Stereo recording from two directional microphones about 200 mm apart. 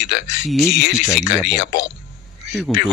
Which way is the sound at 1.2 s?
60° left (ahead or behind).